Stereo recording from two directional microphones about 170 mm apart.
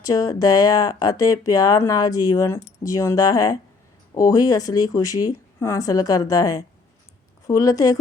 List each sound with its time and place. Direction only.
0.0 s speech: 20° left (ahead or behind)